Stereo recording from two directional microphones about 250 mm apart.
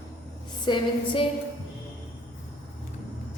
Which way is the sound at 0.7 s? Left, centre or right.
Left.